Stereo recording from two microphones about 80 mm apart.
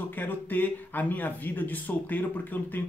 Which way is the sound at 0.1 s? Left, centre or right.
Left.